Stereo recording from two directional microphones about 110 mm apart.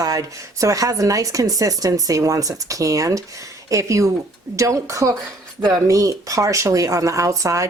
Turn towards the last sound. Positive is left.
turn(degrees=-30)  # may be behind; listen again after turning